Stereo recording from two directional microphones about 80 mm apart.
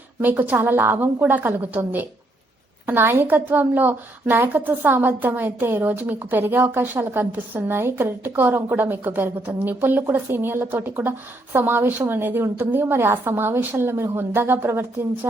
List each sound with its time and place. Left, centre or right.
0.2 s a woman's voice: right